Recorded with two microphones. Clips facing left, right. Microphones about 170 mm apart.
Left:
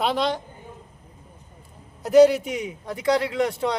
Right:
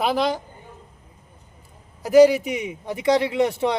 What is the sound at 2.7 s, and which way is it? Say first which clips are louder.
Speech: right 2 dB; 20° right (ahead or behind).